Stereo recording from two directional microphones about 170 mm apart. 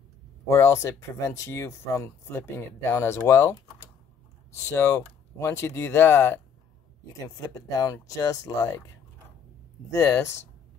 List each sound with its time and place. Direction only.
0.5 s speech: 15° left (ahead or behind)
4.7 s speech: 15° left (ahead or behind)
9.8 s speech: 15° left (ahead or behind)